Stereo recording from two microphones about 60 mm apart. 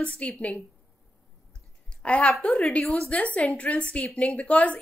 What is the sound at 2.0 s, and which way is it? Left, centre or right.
A woman's voice, left.